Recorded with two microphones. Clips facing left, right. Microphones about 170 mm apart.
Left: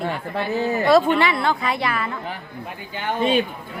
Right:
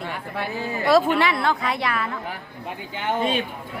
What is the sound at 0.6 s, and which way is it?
Speech, 45° left (ahead or behind).